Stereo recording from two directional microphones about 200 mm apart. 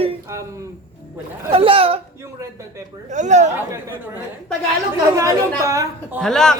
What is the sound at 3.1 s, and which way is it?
Speech, 35° right (ahead or behind).